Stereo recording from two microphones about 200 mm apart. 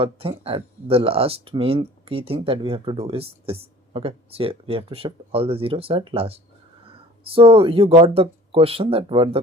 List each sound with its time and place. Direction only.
0.0 s speech: 30° right (ahead or behind)